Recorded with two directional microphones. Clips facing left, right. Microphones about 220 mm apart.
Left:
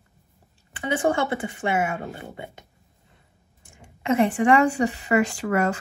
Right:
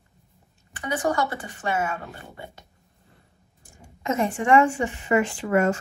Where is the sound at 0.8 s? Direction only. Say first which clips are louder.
Left 2 dB; 25° left (ahead or behind).